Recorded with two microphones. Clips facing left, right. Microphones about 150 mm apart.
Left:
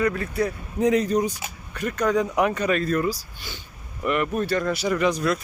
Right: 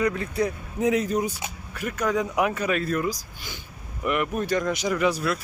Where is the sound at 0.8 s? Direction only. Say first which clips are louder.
Left 3 dB; 10° right (ahead or behind).